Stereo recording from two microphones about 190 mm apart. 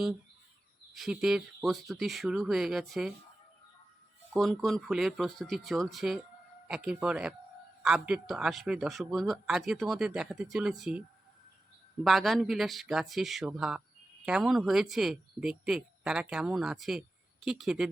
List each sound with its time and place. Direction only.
0.9 s speech: centre (ahead or behind)
4.3 s speech: centre (ahead or behind)
12.0 s speech: centre (ahead or behind)